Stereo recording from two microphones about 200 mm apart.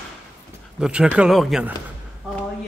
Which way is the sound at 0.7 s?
5° right (ahead or behind).